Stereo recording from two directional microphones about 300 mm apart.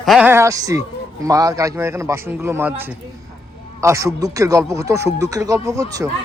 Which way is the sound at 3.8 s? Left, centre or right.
Centre.